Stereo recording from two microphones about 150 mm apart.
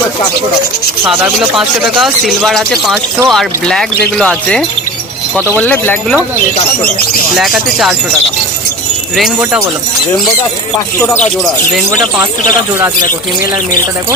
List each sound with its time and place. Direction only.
1.0 s speech: 5° right (ahead or behind); by 6.1 s 10° left (ahead or behind)
7.3 s speech: centre (ahead or behind)
9.1 s speech: 5° right (ahead or behind)
10.8 s speech: 15° left (ahead or behind)